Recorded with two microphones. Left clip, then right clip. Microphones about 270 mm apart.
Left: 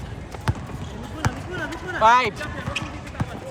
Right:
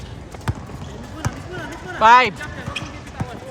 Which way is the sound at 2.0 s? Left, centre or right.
Right.